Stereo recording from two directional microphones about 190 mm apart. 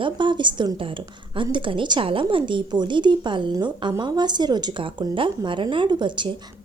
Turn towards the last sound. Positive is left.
turn(degrees=-25)  # may be behind; listen again after turning